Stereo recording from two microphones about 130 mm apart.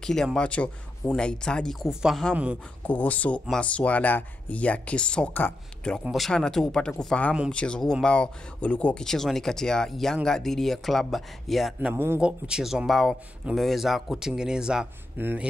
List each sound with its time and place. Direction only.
0.0 s speech: 5° left (ahead or behind)
2.9 s speech: 10° left (ahead or behind)
11.8 s speech: 20° right (ahead or behind)
12.2 s speech: 5° right (ahead or behind)
15.1 s speech: 15° right (ahead or behind)